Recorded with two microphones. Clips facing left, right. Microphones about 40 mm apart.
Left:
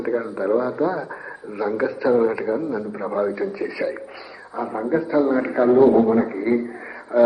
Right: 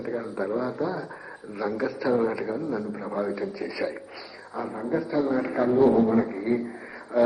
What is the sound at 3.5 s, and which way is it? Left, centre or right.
Speech, left.